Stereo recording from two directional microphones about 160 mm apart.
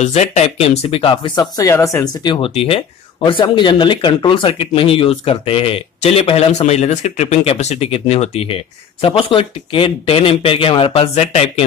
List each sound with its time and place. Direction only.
0.0 s speech: 45° left (ahead or behind)